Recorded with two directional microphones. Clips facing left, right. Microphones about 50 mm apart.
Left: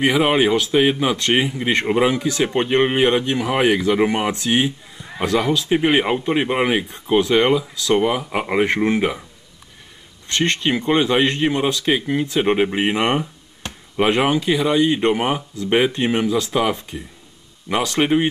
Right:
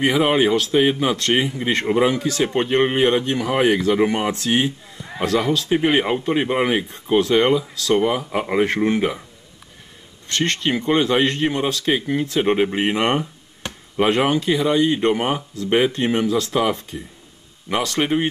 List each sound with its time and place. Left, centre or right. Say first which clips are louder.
0.0 s speech: left 1 dB; left
3.3 s speech: even; centre
4.6 s a man's voice: even; centre
7.5 s speech: even; centre
7.9 s speech: even; centre
10.2 s speech: left 2 dB; left; by 15.0 s centre
15.0 s speech: left 1 dB; left